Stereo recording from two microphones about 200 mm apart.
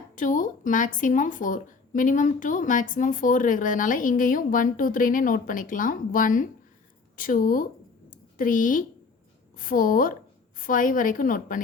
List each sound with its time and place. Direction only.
0.2 s a woman's voice: 40° left (ahead or behind)